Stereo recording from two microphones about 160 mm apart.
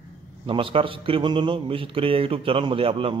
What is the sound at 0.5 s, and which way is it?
Speech, 30° right (ahead or behind).